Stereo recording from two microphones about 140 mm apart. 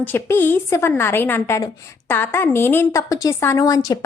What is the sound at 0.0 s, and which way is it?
A woman's voice, 15° left (ahead or behind).